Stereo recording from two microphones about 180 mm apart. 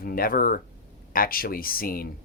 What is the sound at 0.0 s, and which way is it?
Speech, 55° left (ahead or behind).